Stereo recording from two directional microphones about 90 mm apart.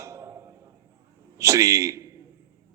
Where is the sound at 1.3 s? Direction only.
35° right (ahead or behind).